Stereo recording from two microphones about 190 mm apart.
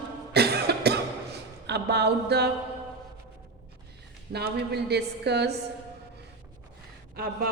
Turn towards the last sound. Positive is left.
turn(degrees=-50)  # may be behind; listen again after turning